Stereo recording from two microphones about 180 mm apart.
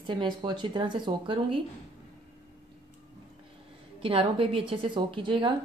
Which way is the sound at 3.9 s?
30° right (ahead or behind).